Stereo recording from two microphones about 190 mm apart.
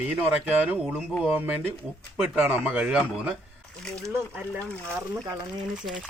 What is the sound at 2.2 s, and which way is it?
Speech, 5° right (ahead or behind).